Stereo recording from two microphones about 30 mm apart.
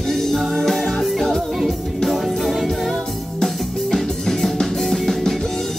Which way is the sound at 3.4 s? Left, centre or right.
Centre.